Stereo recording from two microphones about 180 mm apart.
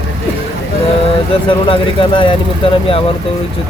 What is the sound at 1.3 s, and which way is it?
Speech, 30° left (ahead or behind).